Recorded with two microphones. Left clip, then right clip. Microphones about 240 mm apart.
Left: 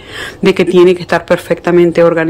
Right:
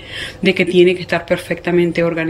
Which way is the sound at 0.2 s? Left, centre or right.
Centre.